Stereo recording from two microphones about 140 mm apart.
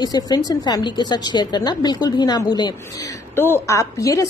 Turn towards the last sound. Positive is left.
turn(degrees=25)  # may be behind; listen again after turning